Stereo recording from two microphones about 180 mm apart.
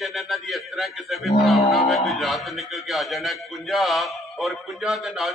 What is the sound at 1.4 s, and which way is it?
A man's voice, centre (ahead or behind).